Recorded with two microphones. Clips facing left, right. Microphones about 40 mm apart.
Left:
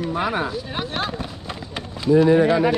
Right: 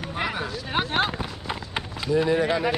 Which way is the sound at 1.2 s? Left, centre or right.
Centre.